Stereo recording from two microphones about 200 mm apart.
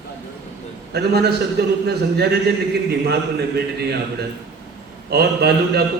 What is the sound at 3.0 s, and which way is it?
Speech, 55° right (ahead or behind).